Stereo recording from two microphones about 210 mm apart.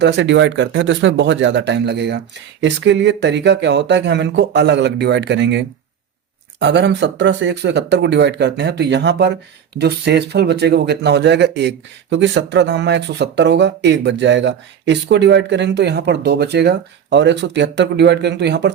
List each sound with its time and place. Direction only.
0.0 s speech: 55° right (ahead or behind)